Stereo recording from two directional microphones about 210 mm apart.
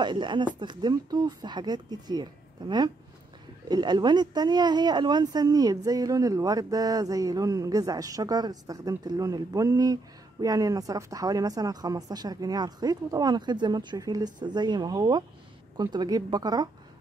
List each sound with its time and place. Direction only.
0.0 s speech: 20° right (ahead or behind)
3.6 s speech: 20° right (ahead or behind)